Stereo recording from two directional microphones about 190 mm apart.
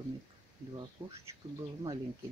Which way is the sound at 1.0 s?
20° right (ahead or behind).